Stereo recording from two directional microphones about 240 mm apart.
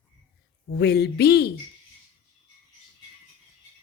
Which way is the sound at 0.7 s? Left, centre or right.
Left.